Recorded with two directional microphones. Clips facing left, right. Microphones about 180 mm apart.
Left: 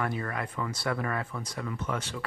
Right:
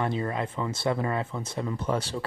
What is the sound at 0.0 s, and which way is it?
Speech, 25° right (ahead or behind).